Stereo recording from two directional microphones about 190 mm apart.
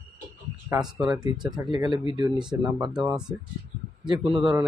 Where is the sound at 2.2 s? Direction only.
25° right (ahead or behind).